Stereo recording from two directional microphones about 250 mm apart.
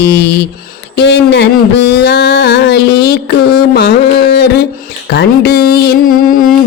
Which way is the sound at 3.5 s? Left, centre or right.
Left.